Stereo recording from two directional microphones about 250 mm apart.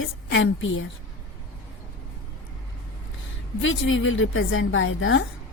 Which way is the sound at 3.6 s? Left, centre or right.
Left.